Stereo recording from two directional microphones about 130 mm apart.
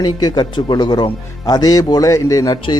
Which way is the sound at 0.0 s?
30° left (ahead or behind).